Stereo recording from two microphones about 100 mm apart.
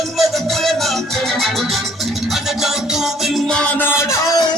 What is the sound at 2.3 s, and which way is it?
Music, 5° right (ahead or behind).